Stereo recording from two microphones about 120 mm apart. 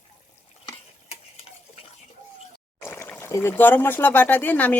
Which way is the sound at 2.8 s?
20° left (ahead or behind).